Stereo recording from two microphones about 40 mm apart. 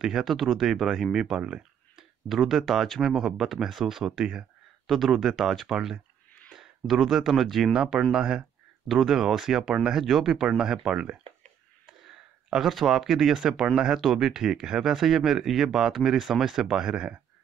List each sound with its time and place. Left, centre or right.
0.0 s speech: centre
2.0 s speech: centre
4.8 s speech: centre
5.3 s speech: centre
7.7 s speech: centre
8.8 s speech: centre
12.6 s speech: centre; by 17.1 s right